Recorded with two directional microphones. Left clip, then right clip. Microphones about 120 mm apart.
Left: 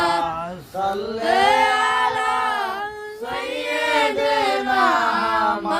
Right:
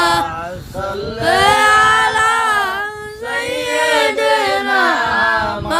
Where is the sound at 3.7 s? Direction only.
35° right (ahead or behind).